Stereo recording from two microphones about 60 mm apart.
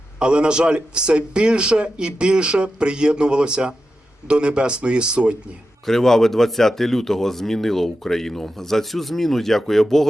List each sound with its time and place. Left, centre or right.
0.2 s speech: centre
5.8 s speech: centre